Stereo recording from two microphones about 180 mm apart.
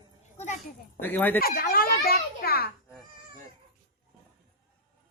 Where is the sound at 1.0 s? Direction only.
10° left (ahead or behind).